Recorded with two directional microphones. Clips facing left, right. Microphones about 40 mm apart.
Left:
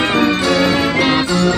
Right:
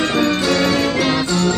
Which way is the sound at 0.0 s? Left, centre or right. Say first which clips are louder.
Left 3 dB; left.